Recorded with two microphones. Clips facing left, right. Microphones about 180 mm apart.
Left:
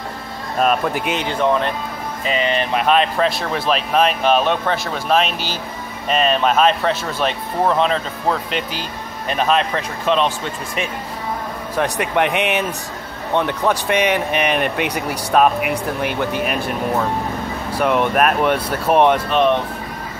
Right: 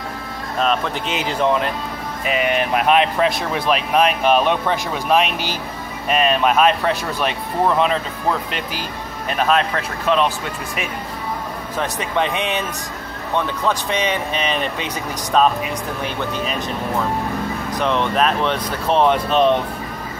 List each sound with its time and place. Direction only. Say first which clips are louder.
0.6 s speech: left 3 dB; 10° left (ahead or behind)
2.2 s speech: even; 10° right (ahead or behind)
3.6 s speech: even; 5° right (ahead or behind)
9.4 s speech: even; centre (ahead or behind)
11.8 s speech: left 3 dB; 15° left (ahead or behind)
17.6 s speech: left 4 dB; 10° left (ahead or behind)